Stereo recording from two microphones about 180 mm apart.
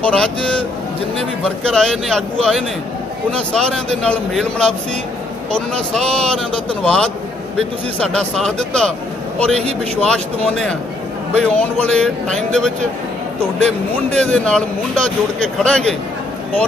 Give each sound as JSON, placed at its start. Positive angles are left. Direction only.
{"t": 0.0, "sound": "speech", "side_deg": 5}
{"t": 9.9, "sound": "speech", "side_deg": 5}